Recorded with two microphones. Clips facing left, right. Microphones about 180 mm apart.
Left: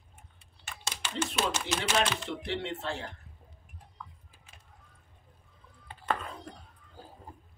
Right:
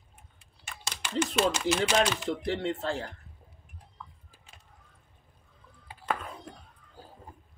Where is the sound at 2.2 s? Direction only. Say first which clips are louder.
Right 5 dB; 40° right (ahead or behind).